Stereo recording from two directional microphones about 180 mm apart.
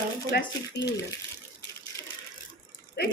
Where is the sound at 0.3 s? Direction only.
60° left (ahead or behind).